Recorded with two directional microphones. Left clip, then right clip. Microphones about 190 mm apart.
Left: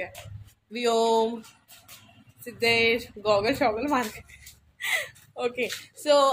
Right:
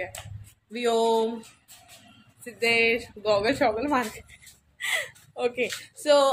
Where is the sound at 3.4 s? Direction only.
Centre (ahead or behind).